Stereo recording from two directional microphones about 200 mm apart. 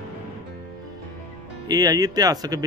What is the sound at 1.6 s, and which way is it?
Speech, 20° right (ahead or behind).